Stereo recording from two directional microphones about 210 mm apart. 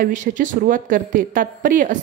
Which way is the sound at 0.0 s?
40° right (ahead or behind).